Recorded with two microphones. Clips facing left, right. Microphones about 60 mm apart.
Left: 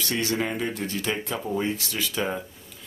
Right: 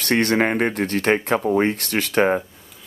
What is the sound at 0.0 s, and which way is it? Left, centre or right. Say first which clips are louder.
Speech: right 8 dB; right.